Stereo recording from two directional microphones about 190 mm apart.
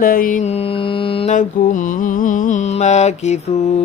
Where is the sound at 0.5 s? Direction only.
30° left (ahead or behind).